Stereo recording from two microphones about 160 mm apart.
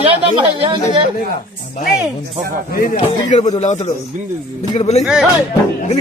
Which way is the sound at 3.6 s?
45° left (ahead or behind).